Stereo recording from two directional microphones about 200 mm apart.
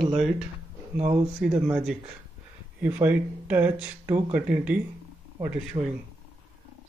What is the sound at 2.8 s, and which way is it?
Speech, 10° right (ahead or behind).